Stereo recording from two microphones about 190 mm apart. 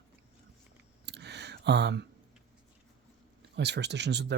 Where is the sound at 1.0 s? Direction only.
65° right (ahead or behind).